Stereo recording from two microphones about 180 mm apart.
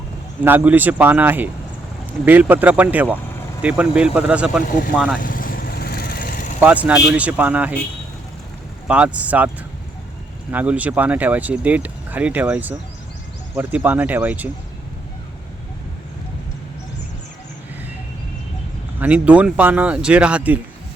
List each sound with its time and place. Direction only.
0.4 s speech: 10° right (ahead or behind)
5.2 s vehicle: 50° left (ahead or behind)
6.6 s speech: 5° right (ahead or behind)
8.9 s speech: 5° right (ahead or behind)
10.5 s speech: 10° right (ahead or behind)
18.9 s speech: 10° right (ahead or behind)